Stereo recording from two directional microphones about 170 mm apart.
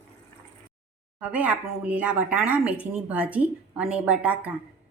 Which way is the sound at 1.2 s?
10° right (ahead or behind).